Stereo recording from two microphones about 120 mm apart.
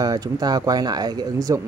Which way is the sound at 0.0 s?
30° right (ahead or behind).